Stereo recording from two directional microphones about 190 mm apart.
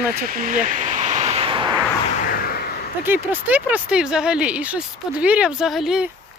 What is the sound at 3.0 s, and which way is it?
Speech, 10° right (ahead or behind).